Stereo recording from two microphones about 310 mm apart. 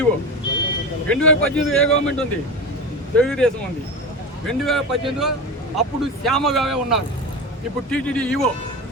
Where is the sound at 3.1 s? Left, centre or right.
Centre.